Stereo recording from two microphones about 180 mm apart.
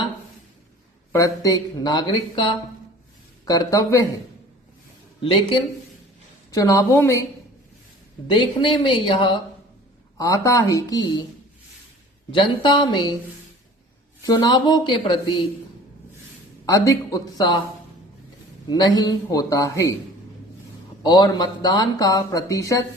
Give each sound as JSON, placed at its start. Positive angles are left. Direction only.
{"t": 1.1, "sound": "speech", "side_deg": 20}
{"t": 6.5, "sound": "a woman's voice", "side_deg": 20}
{"t": 8.3, "sound": "speech", "side_deg": 25}
{"t": 12.3, "sound": "speech", "side_deg": 25}
{"t": 14.2, "sound": "speech", "side_deg": 20}
{"t": 16.6, "sound": "speech", "side_deg": 20}
{"t": 18.7, "sound": "speech", "side_deg": 20}
{"t": 21.0, "sound": "speech", "side_deg": 20}